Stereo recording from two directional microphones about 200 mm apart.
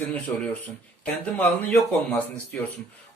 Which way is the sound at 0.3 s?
10° left (ahead or behind).